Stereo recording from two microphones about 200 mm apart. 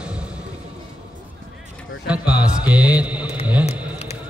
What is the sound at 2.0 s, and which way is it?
A man's voice, 5° right (ahead or behind).